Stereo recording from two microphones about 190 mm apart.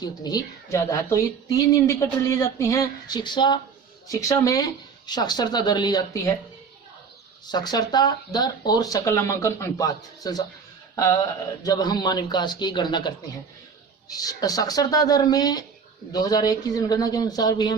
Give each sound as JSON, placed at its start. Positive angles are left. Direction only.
{"t": 0.0, "sound": "speech", "side_deg": 20}
{"t": 7.4, "sound": "speech", "side_deg": 20}